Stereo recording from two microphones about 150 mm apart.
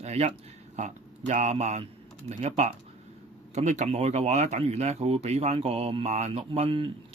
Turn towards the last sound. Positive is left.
turn(degrees=-40)  # may be behind; listen again after turning